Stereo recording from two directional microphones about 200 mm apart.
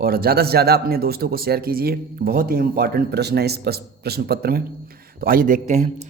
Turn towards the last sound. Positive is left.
turn(degrees=-35)  # may be behind; listen again after turning